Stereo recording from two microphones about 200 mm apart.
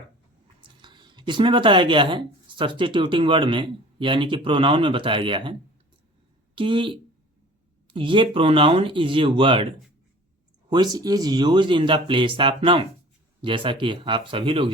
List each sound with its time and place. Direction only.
0.6 s speech: 25° right (ahead or behind)
6.6 s speech: 25° right (ahead or behind)
10.9 s speech: 20° right (ahead or behind)